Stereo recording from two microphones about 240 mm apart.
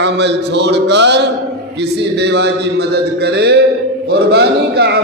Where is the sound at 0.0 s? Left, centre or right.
Right.